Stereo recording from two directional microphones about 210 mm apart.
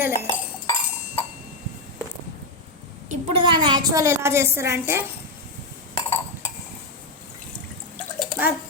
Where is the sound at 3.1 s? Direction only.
25° right (ahead or behind).